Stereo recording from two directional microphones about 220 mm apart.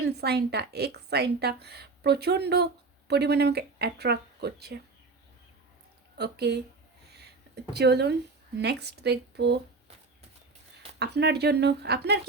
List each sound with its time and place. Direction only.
0.0 s a woman's voice: 45° right (ahead or behind)
6.1 s a woman's voice: 50° right (ahead or behind)
7.1 s a sound: 50° right (ahead or behind)
8.5 s a woman's voice: 50° right (ahead or behind)
11.0 s a woman's voice: 50° right (ahead or behind)